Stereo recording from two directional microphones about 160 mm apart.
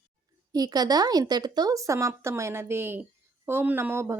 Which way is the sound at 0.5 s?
25° right (ahead or behind).